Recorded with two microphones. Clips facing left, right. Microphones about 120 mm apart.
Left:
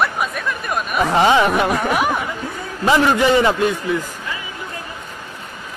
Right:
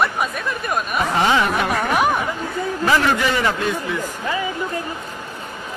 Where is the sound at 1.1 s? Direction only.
20° left (ahead or behind).